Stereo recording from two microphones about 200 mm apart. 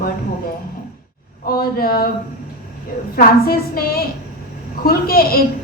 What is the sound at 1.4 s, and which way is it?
Speech, 50° left (ahead or behind).